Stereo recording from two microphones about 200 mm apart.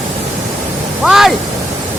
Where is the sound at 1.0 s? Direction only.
Centre (ahead or behind).